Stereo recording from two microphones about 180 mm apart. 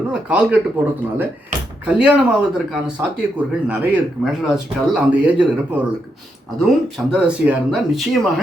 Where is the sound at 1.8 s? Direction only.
5° right (ahead or behind).